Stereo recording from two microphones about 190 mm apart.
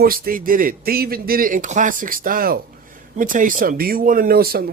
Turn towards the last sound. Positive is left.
turn(degrees=-55)  # may be behind; listen again after turning